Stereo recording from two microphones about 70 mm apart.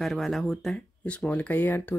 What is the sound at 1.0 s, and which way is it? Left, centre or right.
Speech, centre.